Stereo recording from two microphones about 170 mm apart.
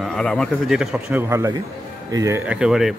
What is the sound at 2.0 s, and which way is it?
Speech, 20° right (ahead or behind).